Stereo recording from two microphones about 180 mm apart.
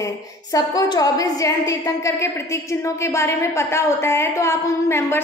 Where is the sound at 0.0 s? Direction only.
20° left (ahead or behind).